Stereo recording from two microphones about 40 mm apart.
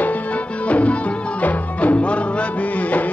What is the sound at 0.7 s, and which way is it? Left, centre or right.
Music, left.